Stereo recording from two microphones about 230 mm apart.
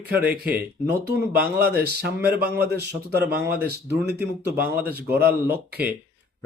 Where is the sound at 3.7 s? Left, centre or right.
Right.